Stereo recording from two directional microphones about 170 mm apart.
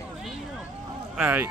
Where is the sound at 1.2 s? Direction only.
10° right (ahead or behind).